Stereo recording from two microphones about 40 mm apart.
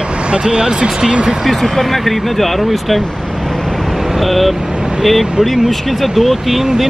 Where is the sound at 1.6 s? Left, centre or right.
Centre.